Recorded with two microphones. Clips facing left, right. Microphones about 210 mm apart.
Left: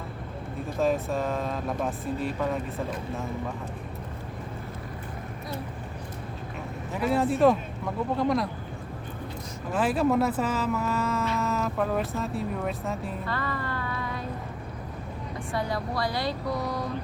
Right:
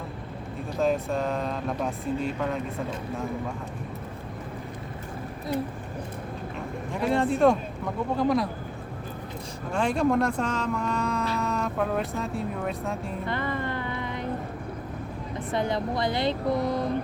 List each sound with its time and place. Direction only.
0.8 s speech: centre (ahead or behind)
7.0 s speech: 5° left (ahead or behind)
9.7 s speech: 5° left (ahead or behind)
13.2 s music: 20° right (ahead or behind)
15.5 s speech: 20° right (ahead or behind)